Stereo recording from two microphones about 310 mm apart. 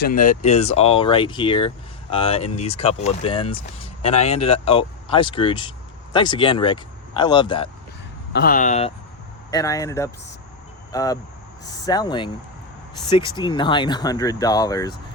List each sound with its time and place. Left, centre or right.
0.1 s speech: left
8.3 s speech: left
9.5 s speech: centre